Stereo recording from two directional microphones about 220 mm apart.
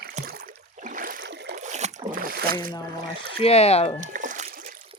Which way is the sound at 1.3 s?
50° right (ahead or behind).